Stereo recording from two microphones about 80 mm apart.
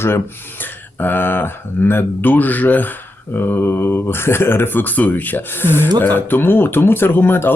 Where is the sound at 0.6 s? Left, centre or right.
Left.